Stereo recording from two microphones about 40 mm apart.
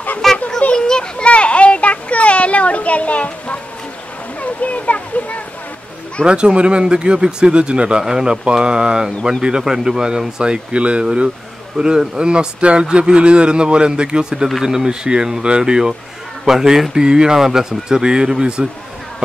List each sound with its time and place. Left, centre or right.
0.2 s a sound: centre
0.7 s children playing: centre
1.1 s children playing: left
4.4 s a sound: left
6.2 s speech: right
8.0 s speech: centre